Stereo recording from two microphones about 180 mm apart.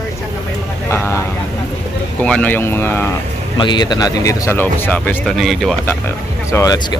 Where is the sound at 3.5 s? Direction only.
25° left (ahead or behind); by 5.9 s centre (ahead or behind).